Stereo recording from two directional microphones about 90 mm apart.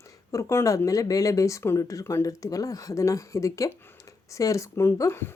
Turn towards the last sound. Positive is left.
turn(degrees=30)  # may be behind; listen again after turning